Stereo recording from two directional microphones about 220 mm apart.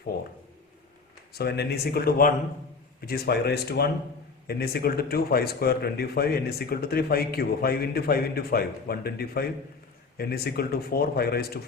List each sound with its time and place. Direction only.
0.1 s speech: 45° left (ahead or behind)
1.3 s speech: 45° left (ahead or behind)